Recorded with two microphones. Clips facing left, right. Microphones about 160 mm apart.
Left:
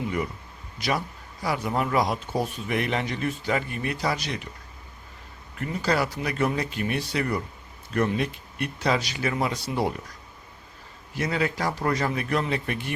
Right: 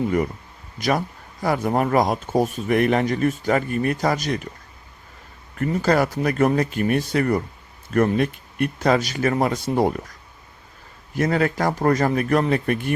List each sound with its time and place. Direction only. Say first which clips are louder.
0.8 s speech: right 5 dB; 45° right (ahead or behind)
5.5 s speech: right 6 dB; 45° right (ahead or behind)
11.1 s speech: right 6 dB; 50° right (ahead or behind)